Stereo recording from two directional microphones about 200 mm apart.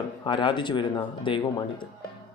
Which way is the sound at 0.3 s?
25° left (ahead or behind).